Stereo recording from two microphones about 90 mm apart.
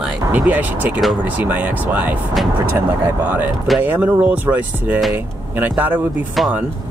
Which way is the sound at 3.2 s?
20° right (ahead or behind).